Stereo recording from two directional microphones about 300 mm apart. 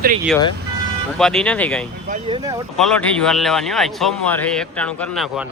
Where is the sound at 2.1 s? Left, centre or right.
Centre.